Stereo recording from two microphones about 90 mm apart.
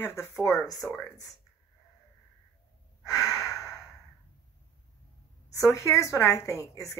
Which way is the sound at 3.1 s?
35° left (ahead or behind).